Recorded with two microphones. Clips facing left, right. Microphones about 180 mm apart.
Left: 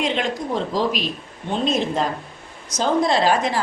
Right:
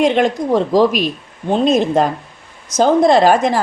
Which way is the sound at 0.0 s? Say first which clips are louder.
Right 9 dB; 50° right (ahead or behind).